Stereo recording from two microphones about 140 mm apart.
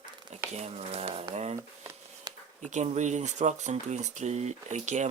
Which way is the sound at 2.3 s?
30° right (ahead or behind).